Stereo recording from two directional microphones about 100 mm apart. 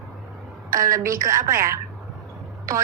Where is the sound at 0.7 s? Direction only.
35° right (ahead or behind).